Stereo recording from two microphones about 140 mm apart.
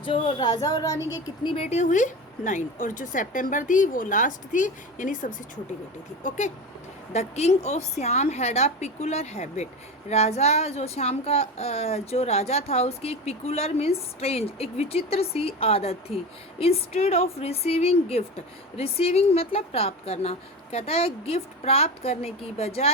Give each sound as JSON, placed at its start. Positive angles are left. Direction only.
{"t": 0.0, "sound": "speech", "side_deg": 40}
{"t": 1.5, "sound": "a woman's voice", "side_deg": 50}